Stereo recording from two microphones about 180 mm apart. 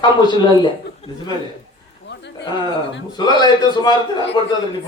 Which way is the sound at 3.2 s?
25° left (ahead or behind).